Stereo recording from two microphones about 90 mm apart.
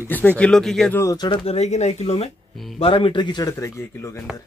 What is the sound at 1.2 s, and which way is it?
Speech, 55° left (ahead or behind).